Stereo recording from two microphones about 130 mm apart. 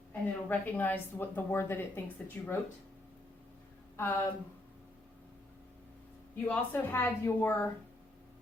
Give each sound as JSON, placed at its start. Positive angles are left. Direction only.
{"t": 0.1, "sound": "a woman's voice", "side_deg": 15}
{"t": 3.9, "sound": "speech", "side_deg": 20}
{"t": 6.5, "sound": "a woman's voice", "side_deg": 15}